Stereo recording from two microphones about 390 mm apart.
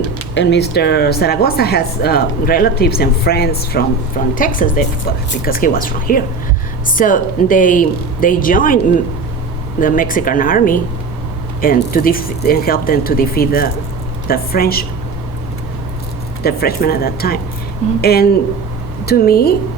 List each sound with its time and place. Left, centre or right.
0.3 s speech: left
9.8 s speech: left
16.4 s speech: left